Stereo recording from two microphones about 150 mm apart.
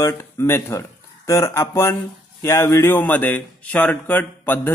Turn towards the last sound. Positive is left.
turn(degrees=10)  # may be behind; listen again after turning